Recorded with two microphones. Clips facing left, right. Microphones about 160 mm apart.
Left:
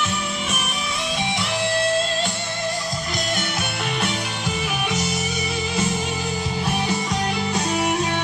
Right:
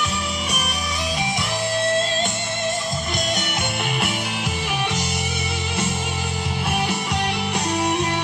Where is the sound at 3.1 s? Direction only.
Centre (ahead or behind).